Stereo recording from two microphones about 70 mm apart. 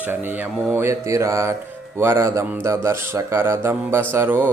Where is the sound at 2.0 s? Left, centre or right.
Right.